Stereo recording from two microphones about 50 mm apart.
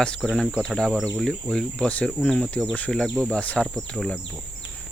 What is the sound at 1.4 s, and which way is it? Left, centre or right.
Speech, centre.